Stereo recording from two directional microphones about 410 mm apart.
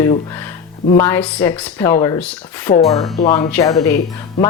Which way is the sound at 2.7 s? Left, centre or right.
Centre.